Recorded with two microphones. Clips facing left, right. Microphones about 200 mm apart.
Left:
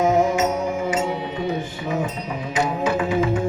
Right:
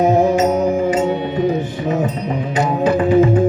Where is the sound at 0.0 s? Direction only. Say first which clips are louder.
Right 5 dB; 30° right (ahead or behind).